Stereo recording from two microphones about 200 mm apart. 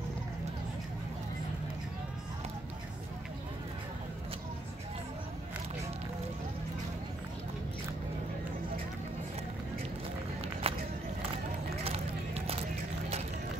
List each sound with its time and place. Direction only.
10.6 s run: 30° right (ahead or behind)